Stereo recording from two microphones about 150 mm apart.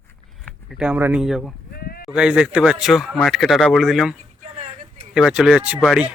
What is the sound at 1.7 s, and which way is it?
Sheep, 85° left.